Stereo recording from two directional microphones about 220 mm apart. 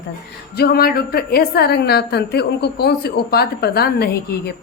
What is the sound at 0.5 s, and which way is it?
A woman's voice, 45° left (ahead or behind).